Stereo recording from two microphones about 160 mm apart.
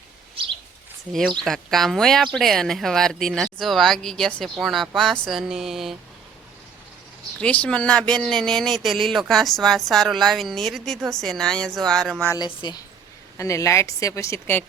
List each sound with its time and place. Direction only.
1.1 s speech: centre (ahead or behind)
7.4 s speech: 5° left (ahead or behind)
12.4 s a woman's voice: 25° left (ahead or behind)